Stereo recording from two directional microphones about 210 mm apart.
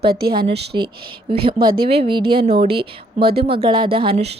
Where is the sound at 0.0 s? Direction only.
45° right (ahead or behind).